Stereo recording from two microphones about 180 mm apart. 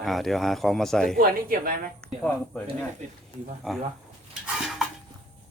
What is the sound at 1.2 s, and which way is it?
Speech, 55° right (ahead or behind).